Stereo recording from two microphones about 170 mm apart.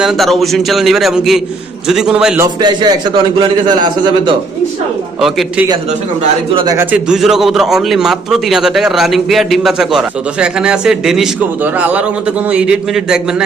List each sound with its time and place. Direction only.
0.0 s a man's voice: centre (ahead or behind)
2.6 s a man's voice: 25° right (ahead or behind)
5.2 s a man's voice: centre (ahead or behind)
6.5 s a man's voice: 30° right (ahead or behind)
6.7 s a man's voice: 5° right (ahead or behind)